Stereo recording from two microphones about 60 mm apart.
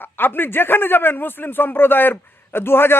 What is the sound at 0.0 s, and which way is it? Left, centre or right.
A man's voice, left.